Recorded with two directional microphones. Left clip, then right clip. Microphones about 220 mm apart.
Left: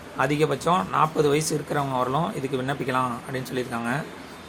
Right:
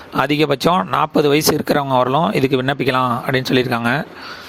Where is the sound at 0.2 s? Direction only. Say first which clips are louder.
Right 7 dB; 45° right (ahead or behind).